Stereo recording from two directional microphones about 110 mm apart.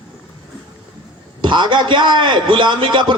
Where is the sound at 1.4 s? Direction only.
45° right (ahead or behind).